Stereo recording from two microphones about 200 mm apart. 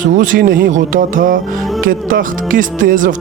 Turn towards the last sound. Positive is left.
turn(degrees=-40)  # may be behind; listen again after turning